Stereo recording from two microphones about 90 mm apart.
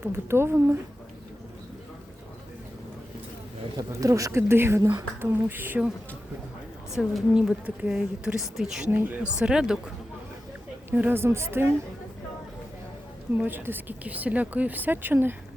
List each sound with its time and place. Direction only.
0.0 s speech: 25° right (ahead or behind)
3.8 s speech: 40° right (ahead or behind); by 5.9 s 20° right (ahead or behind)
6.9 s a woman's voice: centre (ahead or behind)
7.3 s a woman's voice: 15° right (ahead or behind)
8.9 s speech: 20° right (ahead or behind)
9.4 s a woman's voice: 10° right (ahead or behind)
10.9 s speech: 20° right (ahead or behind)
13.3 s speech: 20° right (ahead or behind)